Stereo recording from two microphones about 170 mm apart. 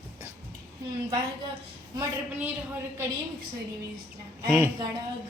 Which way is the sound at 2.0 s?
15° right (ahead or behind).